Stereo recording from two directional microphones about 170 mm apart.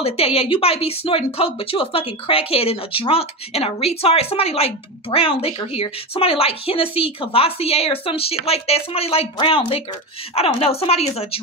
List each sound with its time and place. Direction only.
0.0 s speech: 35° left (ahead or behind)